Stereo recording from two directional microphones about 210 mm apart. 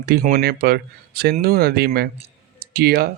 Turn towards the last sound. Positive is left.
turn(degrees=-45)  # may be behind; listen again after turning